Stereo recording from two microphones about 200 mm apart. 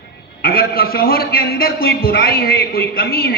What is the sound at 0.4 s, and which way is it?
A man's voice, 50° left (ahead or behind).